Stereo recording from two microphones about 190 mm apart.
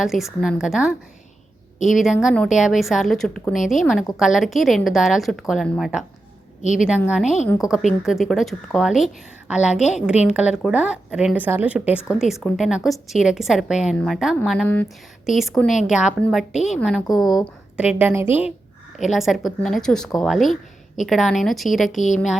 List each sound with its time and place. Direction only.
0.0 s a woman's voice: centre (ahead or behind)
6.6 s a woman's voice: 40° left (ahead or behind)
7.1 s a woman's voice: 5° right (ahead or behind)
22.0 s a woman's voice: 40° left (ahead or behind)